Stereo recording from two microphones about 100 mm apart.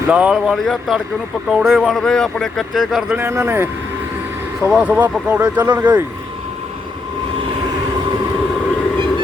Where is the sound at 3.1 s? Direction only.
25° right (ahead or behind).